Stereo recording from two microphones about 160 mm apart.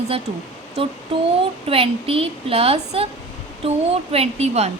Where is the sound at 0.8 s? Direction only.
35° right (ahead or behind).